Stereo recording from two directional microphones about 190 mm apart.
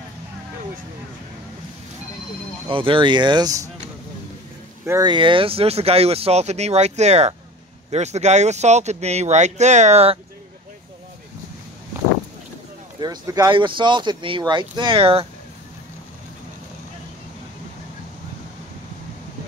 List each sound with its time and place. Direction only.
2.7 s speech: 25° right (ahead or behind)
4.8 s speech: 20° right (ahead or behind); by 10.1 s 35° right (ahead or behind)
13.0 s speech: 20° right (ahead or behind)